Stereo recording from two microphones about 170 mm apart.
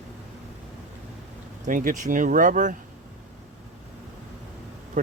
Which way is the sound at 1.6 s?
50° right (ahead or behind).